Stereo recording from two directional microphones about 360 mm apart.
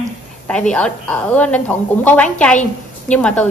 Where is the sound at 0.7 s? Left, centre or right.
Centre.